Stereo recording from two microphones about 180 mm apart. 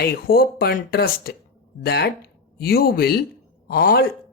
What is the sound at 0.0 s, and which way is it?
Speech, 55° left (ahead or behind).